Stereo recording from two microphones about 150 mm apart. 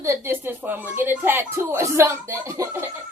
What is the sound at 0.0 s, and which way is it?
Speech, 15° right (ahead or behind).